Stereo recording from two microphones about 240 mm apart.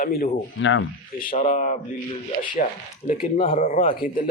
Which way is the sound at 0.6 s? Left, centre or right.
Left.